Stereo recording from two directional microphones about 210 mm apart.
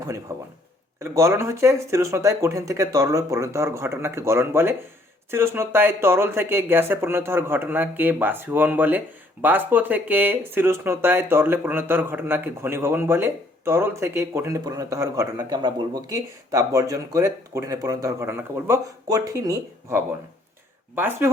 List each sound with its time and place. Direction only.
0.0 s speech: 15° right (ahead or behind)